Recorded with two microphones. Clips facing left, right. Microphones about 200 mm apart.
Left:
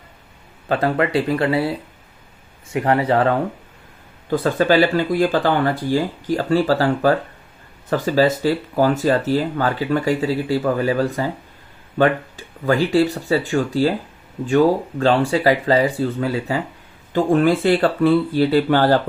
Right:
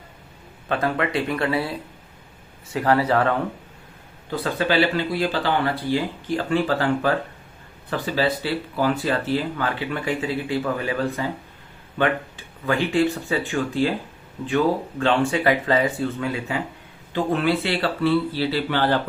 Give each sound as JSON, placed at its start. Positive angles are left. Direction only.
{"t": 0.7, "sound": "speech", "side_deg": 30}
{"t": 2.7, "sound": "speech", "side_deg": 25}
{"t": 4.3, "sound": "speech", "side_deg": 45}